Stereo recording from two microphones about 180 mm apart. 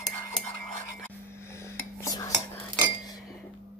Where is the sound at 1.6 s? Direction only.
15° left (ahead or behind).